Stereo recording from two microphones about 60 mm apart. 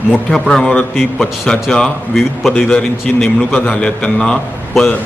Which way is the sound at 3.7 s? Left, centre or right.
Centre.